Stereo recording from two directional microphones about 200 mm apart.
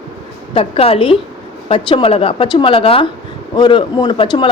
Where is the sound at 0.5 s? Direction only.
30° left (ahead or behind).